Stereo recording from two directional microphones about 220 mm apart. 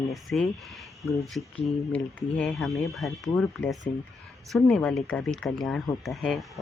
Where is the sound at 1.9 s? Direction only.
5° left (ahead or behind).